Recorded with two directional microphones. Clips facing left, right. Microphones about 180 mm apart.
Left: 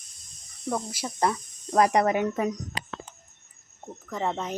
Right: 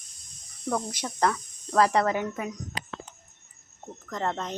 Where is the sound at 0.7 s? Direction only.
10° left (ahead or behind).